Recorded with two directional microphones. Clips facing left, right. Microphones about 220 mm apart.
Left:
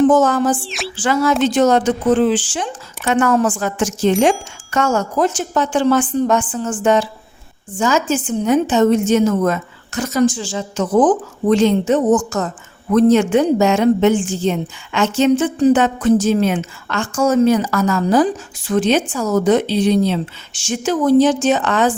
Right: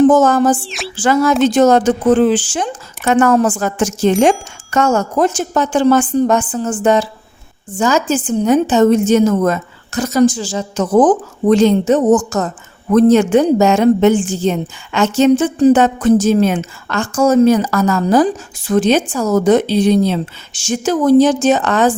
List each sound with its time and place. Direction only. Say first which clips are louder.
0.1 s speech: right 3 dB; 45° right (ahead or behind)
0.6 s speech: even; centre (ahead or behind)
0.9 s a woman's voice: right 3 dB; 45° right (ahead or behind)